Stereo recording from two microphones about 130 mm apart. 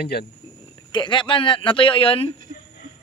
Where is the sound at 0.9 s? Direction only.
40° left (ahead or behind).